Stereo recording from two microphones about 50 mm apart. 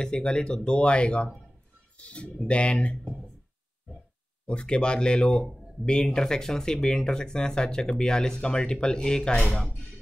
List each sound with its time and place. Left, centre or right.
0.0 s speech: centre
4.5 s speech: centre